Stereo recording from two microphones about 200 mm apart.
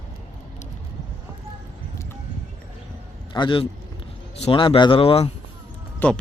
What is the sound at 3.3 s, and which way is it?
Speech, 25° left (ahead or behind).